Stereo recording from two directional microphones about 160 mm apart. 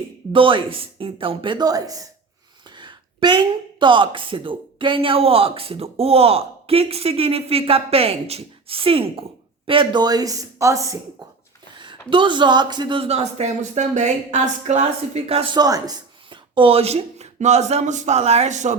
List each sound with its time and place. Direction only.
0.3 s a woman's voice: 35° right (ahead or behind)
11.8 s speech: 30° right (ahead or behind)
15.5 s speech: 25° right (ahead or behind); by 18.8 s 45° right (ahead or behind)